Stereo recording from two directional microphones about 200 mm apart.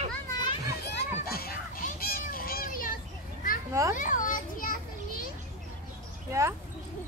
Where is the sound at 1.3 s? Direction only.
50° left (ahead or behind).